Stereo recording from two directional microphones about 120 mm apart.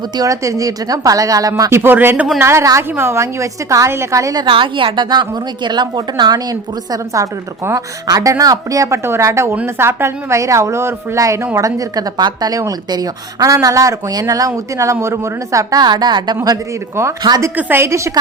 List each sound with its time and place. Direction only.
0.2 s a woman's voice: 25° right (ahead or behind)
4.4 s a woman's voice: 45° right (ahead or behind)
17.6 s a woman's voice: 20° right (ahead or behind)